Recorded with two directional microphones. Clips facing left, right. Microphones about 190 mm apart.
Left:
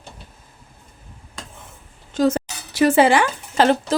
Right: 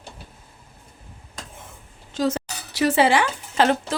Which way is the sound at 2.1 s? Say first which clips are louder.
Left 5 dB; 50° left (ahead or behind).